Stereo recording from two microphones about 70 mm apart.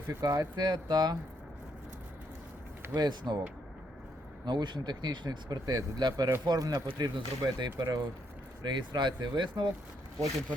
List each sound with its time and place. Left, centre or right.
0.2 s speech: right
2.9 s speech: right
4.4 s speech: right